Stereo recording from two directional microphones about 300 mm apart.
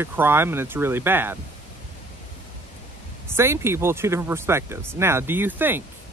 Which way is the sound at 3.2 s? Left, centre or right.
Centre.